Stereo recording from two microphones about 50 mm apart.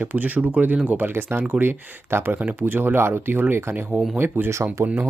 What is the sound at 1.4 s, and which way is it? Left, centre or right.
Speech, right.